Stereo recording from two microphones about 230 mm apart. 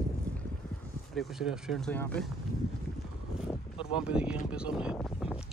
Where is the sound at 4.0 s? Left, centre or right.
Centre.